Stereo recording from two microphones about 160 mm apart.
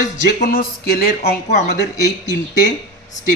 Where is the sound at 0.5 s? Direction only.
70° left (ahead or behind).